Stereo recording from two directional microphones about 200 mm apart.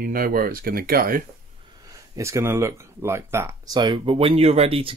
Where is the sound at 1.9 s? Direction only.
15° right (ahead or behind).